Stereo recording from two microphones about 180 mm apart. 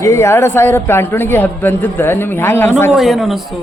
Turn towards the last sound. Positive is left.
turn(degrees=0)  # may be behind; listen again after turning